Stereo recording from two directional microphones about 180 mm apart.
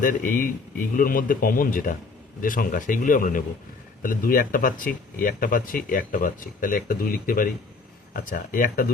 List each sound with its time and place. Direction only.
0.0 s speech: 50° left (ahead or behind)